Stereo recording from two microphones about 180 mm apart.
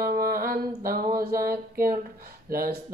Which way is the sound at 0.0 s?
55° right (ahead or behind).